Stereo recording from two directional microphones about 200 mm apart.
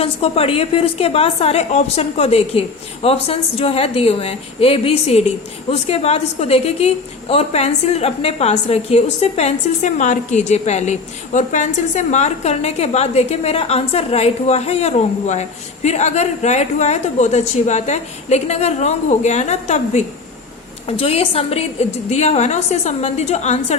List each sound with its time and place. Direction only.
0.0 s a woman's voice: 30° left (ahead or behind)